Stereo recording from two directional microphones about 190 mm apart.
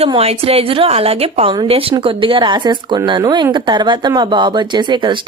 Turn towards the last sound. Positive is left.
turn(degrees=-25)  # may be behind; listen again after turning